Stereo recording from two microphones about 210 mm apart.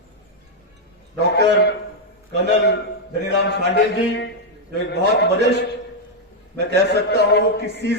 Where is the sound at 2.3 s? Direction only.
55° left (ahead or behind).